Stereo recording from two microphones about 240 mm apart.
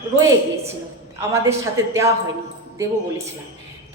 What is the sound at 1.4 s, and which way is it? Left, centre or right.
Speech, centre.